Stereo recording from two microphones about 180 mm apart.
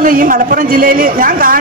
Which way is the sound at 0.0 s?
50° right (ahead or behind).